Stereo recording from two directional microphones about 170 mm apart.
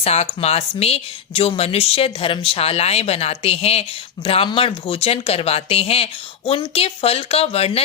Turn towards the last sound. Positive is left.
turn(degrees=35)  # may be behind; listen again after turning